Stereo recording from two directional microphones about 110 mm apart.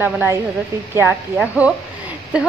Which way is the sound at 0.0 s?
20° right (ahead or behind).